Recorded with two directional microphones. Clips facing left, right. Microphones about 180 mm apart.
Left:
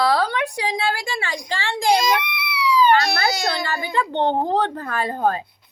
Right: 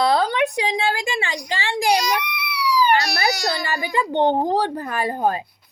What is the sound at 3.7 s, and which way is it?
A woman's voice, 15° right (ahead or behind).